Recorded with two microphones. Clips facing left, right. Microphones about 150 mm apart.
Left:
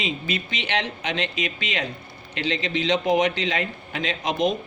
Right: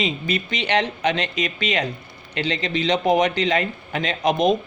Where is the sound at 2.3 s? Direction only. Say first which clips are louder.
Right 2 dB; 60° right (ahead or behind).